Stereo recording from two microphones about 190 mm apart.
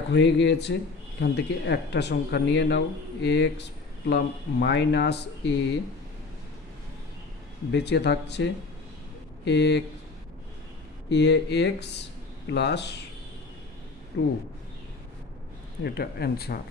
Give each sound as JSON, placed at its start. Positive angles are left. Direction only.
{"t": 0.1, "sound": "speech", "side_deg": 70}
{"t": 7.7, "sound": "speech", "side_deg": 65}
{"t": 11.1, "sound": "speech", "side_deg": 65}
{"t": 15.8, "sound": "speech", "side_deg": 55}